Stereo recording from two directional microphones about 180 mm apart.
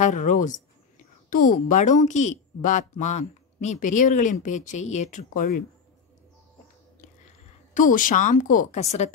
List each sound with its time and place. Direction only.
0.0 s a woman's voice: 45° left (ahead or behind)
7.7 s a woman's voice: 50° left (ahead or behind)